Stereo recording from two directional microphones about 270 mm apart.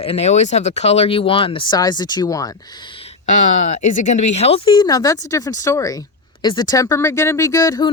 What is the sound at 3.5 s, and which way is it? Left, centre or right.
Speech, left.